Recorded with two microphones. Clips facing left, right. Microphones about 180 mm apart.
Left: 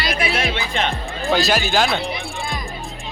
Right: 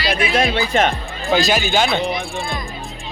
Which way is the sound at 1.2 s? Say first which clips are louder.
Right 1 dB; centre (ahead or behind).